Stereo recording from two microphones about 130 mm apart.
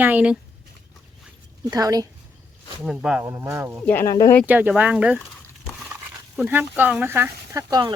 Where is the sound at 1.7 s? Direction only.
30° right (ahead or behind).